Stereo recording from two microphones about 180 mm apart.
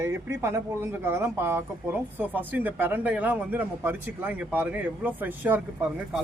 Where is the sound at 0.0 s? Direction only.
15° right (ahead or behind).